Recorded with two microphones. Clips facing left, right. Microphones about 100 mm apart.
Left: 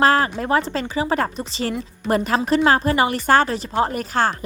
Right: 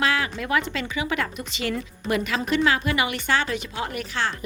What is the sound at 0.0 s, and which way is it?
A woman's voice, 40° left (ahead or behind).